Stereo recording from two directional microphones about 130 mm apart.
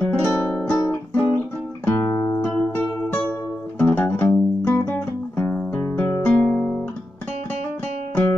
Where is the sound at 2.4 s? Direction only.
15° left (ahead or behind).